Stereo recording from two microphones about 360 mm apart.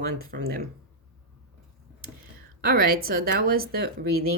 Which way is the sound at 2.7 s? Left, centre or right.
Right.